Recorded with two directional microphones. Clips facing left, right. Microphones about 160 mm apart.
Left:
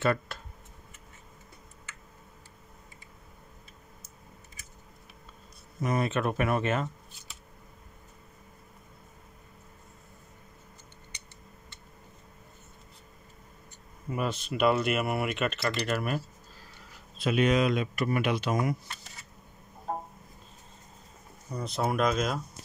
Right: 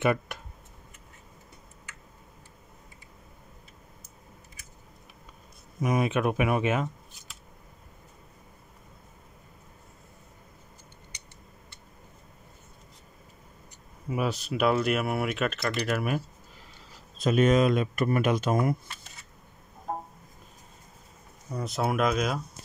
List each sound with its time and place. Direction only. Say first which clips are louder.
0.0 s speech: right 2 dB; 15° right (ahead or behind)
5.8 s speech: right 3 dB; 10° right (ahead or behind)
14.0 s speech: right 2 dB; 5° right (ahead or behind)
17.2 s speech: right 3 dB; 45° right (ahead or behind)
21.5 s speech: right 1 dB; centre (ahead or behind)